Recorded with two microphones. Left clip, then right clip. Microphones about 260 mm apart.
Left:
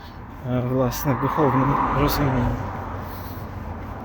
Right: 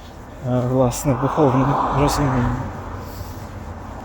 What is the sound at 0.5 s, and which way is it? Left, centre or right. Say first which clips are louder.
Speech: right 4 dB; centre.